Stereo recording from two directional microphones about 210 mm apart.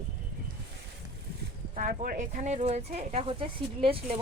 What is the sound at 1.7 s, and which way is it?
Speech, 40° right (ahead or behind).